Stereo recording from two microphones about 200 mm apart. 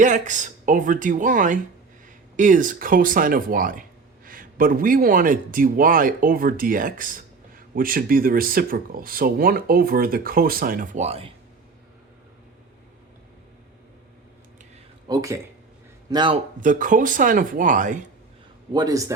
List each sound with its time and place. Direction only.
0.0 s speech: 40° right (ahead or behind)
15.0 s a man's voice: 15° right (ahead or behind)
16.6 s speech: 40° right (ahead or behind)
18.7 s a man's voice: 20° right (ahead or behind)